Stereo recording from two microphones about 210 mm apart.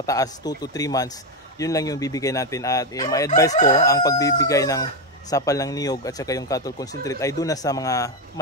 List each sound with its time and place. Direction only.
0.0 s speech: 15° left (ahead or behind)